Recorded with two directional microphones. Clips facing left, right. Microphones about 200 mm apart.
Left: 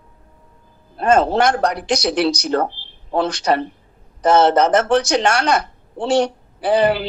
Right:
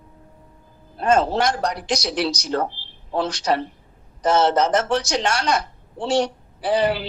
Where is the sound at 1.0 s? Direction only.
60° left (ahead or behind).